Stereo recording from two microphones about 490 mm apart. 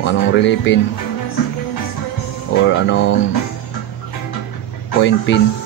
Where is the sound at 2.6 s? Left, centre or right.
Left.